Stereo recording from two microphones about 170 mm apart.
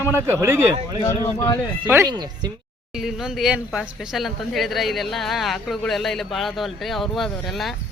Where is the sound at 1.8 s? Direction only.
20° right (ahead or behind).